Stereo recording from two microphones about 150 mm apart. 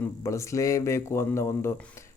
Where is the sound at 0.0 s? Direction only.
20° left (ahead or behind).